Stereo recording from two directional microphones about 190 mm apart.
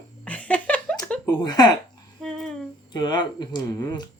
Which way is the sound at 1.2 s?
20° left (ahead or behind).